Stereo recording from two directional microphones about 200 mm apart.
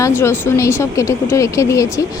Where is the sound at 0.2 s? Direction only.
15° left (ahead or behind).